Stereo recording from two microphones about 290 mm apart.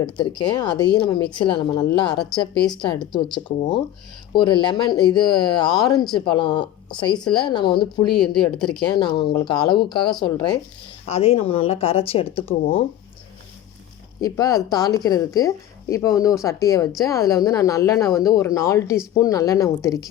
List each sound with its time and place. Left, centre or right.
0.0 s speech: centre
3.2 s speech: centre
7.1 s a woman's voice: centre
7.4 s speech: centre
8.4 s a woman's voice: centre
8.9 s speech: centre
14.2 s speech: centre